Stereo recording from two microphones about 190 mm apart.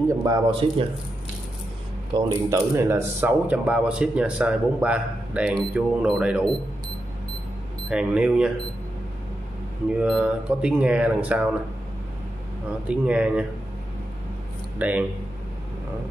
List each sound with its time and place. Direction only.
0.2 s speech: 25° right (ahead or behind)
2.1 s speech: 15° right (ahead or behind)
7.9 s speech: 5° right (ahead or behind)
9.8 s speech: 5° right (ahead or behind)
12.8 s speech: 5° right (ahead or behind)
14.8 s speech: 10° right (ahead or behind)